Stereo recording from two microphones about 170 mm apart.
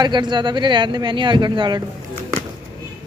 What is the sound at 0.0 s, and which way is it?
Speech, 25° right (ahead or behind).